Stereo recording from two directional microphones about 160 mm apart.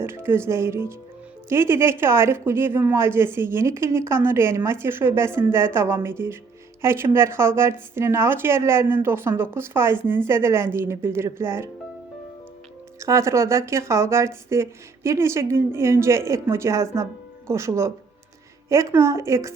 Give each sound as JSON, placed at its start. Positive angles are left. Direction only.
{"t": 0.0, "sound": "speech", "side_deg": -15}
{"t": 13.0, "sound": "a woman's voice", "side_deg": -20}